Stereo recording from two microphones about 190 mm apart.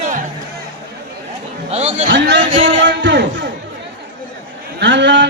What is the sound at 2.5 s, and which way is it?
Speech, 25° right (ahead or behind).